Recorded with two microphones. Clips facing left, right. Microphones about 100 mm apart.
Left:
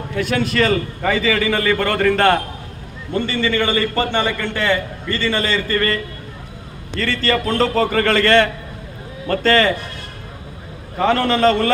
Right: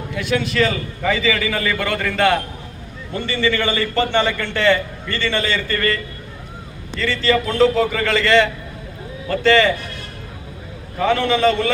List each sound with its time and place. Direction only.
0.2 s a man's voice: 45° left (ahead or behind)
1.9 s a man's voice: 40° left (ahead or behind)
3.4 s a man's voice: 30° left (ahead or behind)
4.1 s speech: 15° left (ahead or behind)
5.0 s a man's voice: 40° left (ahead or behind)
6.9 s a man's voice: 50° left (ahead or behind)
10.9 s a man's voice: 40° left (ahead or behind)